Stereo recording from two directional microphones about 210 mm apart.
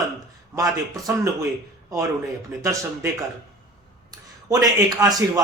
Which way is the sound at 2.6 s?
15° right (ahead or behind).